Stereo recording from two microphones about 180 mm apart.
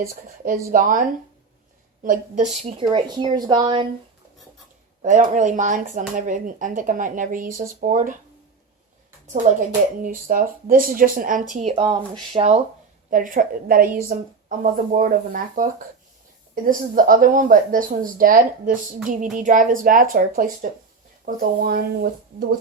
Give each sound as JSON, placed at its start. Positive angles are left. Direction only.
{"t": 0.1, "sound": "speech", "side_deg": -50}
{"t": 2.0, "sound": "speech", "side_deg": -45}
{"t": 2.7, "sound": "a woman's voice", "side_deg": -25}
{"t": 5.0, "sound": "speech", "side_deg": -45}
{"t": 9.2, "sound": "speech", "side_deg": -45}
{"t": 11.7, "sound": "a woman's voice", "side_deg": -30}
{"t": 13.1, "sound": "speech", "side_deg": -45}